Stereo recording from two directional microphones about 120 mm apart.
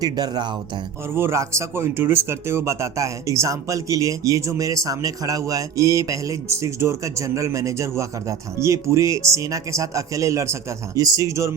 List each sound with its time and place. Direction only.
0.0 s speech: 35° right (ahead or behind)
1.1 s speech: 20° right (ahead or behind)